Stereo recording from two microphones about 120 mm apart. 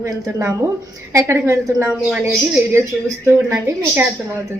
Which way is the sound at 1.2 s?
25° right (ahead or behind).